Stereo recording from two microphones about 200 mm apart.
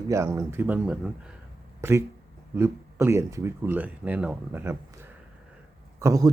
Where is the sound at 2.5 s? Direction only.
10° right (ahead or behind).